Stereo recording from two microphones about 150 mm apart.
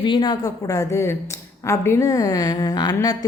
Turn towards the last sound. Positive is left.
turn(degrees=25)  # may be behind; listen again after turning